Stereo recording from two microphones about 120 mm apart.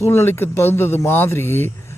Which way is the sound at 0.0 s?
20° left (ahead or behind).